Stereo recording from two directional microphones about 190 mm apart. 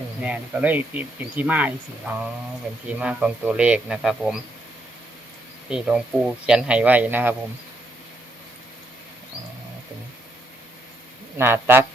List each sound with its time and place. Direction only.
0.2 s speech: 5° right (ahead or behind)
5.6 s speech: 5° right (ahead or behind)
11.3 s speech: 10° right (ahead or behind)